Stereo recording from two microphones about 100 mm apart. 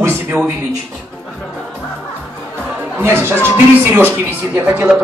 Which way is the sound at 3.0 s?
25° right (ahead or behind).